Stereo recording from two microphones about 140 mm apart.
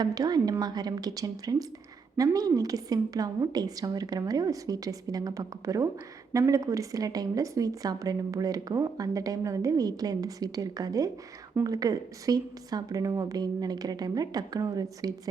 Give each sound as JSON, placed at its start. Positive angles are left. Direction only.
{"t": 0.0, "sound": "a woman's voice", "side_deg": -30}